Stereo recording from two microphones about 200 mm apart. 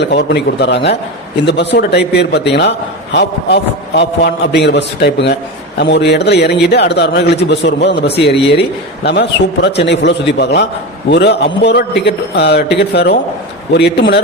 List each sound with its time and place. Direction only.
0.0 s a man's voice: 60° left (ahead or behind)
7.9 s a man's voice: 30° left (ahead or behind)
9.0 s a man's voice: 60° left (ahead or behind)